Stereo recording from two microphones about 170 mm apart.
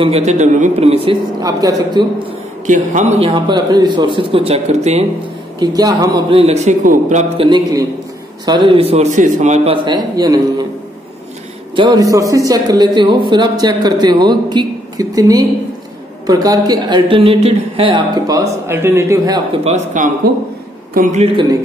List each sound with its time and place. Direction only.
0.0 s a man's voice: 40° right (ahead or behind)
1.4 s speech: 20° right (ahead or behind)
2.6 s a man's voice: 45° right (ahead or behind)
5.6 s speech: 20° right (ahead or behind)
6.4 s speech: 40° right (ahead or behind)
7.3 s a man's voice: 25° right (ahead or behind); by 9.8 s 45° right (ahead or behind)
9.8 s speech: 25° right (ahead or behind)
11.7 s a man's voice: 25° right (ahead or behind)
19.6 s speech: 45° right (ahead or behind)